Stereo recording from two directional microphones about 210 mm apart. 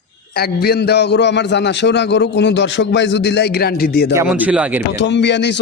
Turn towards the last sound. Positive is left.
turn(degrees=55)  # may be behind; listen again after turning